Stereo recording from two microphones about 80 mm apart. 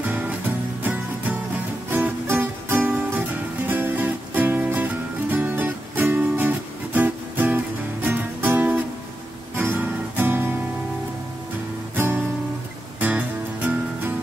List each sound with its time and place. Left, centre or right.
0.0 s music: centre
1.9 s music: right
9.6 s guitar: right
11.9 s guitar: right
13.0 s music: centre